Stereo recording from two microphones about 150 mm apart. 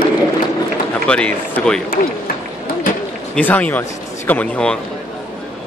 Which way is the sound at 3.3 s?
10° left (ahead or behind).